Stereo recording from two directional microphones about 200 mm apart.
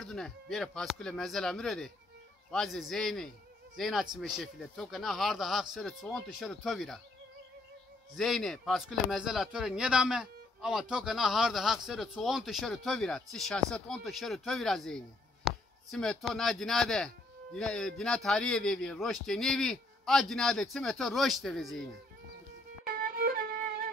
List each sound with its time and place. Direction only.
0.0 s speech: centre (ahead or behind)
8.2 s speech: centre (ahead or behind)
22.8 s music: 50° right (ahead or behind)